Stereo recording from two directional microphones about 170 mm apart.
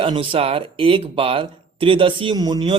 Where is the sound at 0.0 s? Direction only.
30° right (ahead or behind).